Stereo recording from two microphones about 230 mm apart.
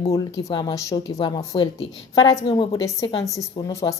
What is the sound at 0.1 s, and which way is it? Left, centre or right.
A woman's voice, centre.